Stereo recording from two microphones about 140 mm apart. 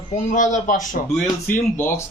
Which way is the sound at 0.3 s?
65° left (ahead or behind).